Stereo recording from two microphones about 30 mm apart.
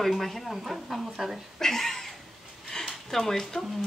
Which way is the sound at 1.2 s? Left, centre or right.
Centre.